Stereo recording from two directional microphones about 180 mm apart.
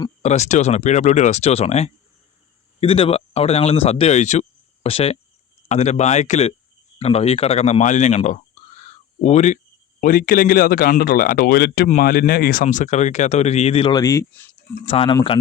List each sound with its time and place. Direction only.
0.2 s speech: 40° left (ahead or behind)
10.0 s speech: 50° left (ahead or behind); by 14.4 s 15° left (ahead or behind)
14.8 s speech: 30° left (ahead or behind)